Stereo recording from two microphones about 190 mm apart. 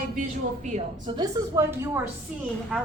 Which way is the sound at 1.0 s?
25° right (ahead or behind).